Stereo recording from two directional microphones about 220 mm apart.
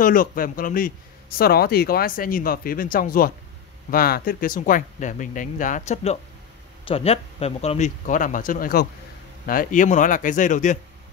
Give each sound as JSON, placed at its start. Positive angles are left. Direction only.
{"t": 0.0, "sound": "speech", "side_deg": 40}